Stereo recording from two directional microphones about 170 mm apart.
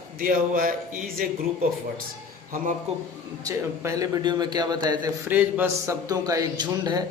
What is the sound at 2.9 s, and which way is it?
Speech, 40° right (ahead or behind).